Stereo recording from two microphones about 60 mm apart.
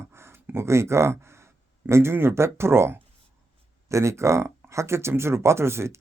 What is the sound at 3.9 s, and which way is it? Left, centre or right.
Speech, right.